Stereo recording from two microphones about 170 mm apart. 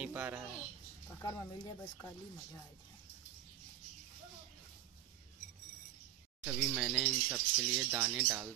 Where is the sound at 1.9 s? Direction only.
15° left (ahead or behind).